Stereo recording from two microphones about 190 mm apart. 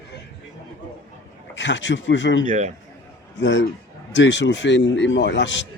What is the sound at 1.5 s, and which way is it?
Speech, 70° left (ahead or behind).